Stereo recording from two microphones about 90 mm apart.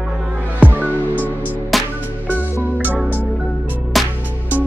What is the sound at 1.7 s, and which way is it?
Music, centre (ahead or behind).